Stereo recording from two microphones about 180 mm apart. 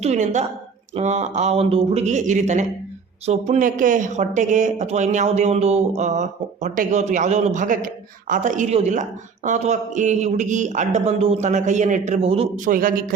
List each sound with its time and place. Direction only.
0.0 s speech: 40° right (ahead or behind)